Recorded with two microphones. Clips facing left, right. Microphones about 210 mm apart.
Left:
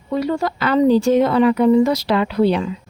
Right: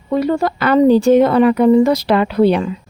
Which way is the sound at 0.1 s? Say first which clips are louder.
Right 4 dB; 55° right (ahead or behind).